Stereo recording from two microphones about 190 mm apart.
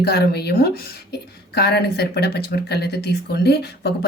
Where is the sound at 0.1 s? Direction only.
60° left (ahead or behind).